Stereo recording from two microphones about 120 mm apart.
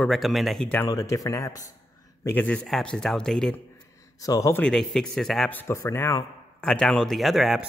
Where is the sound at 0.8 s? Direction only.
25° left (ahead or behind).